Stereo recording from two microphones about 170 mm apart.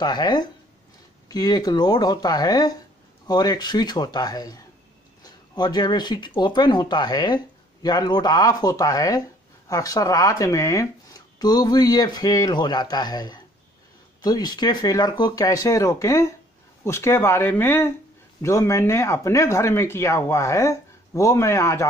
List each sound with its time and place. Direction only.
0.0 s speech: 25° left (ahead or behind)